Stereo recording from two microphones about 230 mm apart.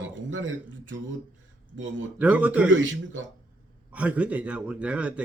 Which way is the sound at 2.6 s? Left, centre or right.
Right.